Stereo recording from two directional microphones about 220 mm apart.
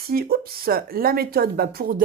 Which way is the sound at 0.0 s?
45° right (ahead or behind).